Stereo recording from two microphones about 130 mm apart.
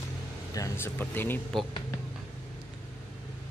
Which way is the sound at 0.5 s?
20° left (ahead or behind).